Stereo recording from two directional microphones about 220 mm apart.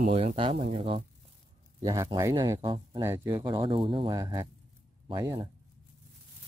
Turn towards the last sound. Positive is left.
turn(degrees=-15)  # may be behind; listen again after turning